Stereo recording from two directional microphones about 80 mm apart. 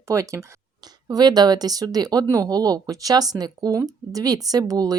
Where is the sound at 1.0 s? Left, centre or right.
Right.